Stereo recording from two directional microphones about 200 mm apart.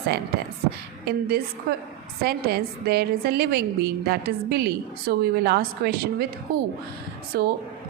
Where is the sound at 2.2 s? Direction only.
50° right (ahead or behind).